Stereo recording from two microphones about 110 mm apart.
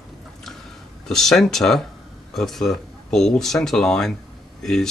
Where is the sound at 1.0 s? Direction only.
5° left (ahead or behind).